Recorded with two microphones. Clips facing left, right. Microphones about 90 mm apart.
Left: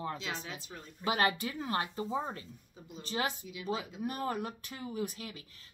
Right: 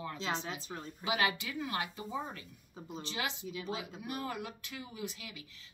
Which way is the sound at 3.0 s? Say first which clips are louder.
Left 4 dB; 45° left (ahead or behind).